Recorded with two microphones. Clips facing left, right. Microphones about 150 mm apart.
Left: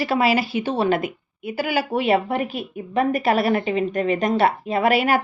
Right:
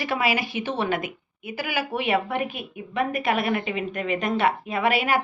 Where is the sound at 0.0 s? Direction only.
30° left (ahead or behind).